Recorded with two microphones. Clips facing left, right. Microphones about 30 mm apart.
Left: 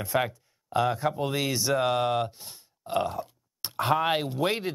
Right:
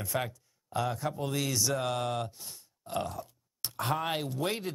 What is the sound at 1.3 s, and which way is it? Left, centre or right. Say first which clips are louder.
Speech: left 4 dB; left.